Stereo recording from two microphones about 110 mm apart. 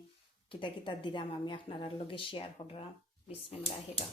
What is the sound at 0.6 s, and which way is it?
A woman's voice, 45° left (ahead or behind).